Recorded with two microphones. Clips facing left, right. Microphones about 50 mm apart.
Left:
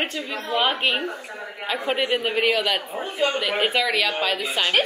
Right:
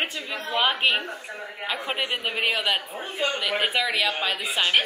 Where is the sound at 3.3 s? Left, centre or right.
Centre.